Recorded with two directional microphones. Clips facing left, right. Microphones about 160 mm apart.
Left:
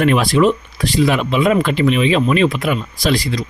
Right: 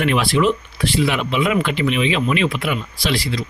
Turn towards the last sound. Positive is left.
turn(degrees=40)  # may be behind; listen again after turning